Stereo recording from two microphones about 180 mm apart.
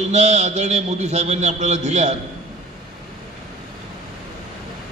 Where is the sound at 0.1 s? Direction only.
40° right (ahead or behind).